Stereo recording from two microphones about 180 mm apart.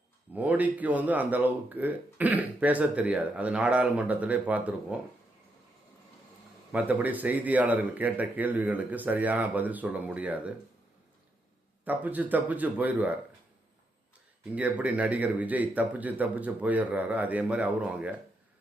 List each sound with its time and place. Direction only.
0.3 s speech: 10° right (ahead or behind)
6.7 s speech: 10° right (ahead or behind)
11.9 s speech: 10° right (ahead or behind)
14.5 s speech: 10° right (ahead or behind)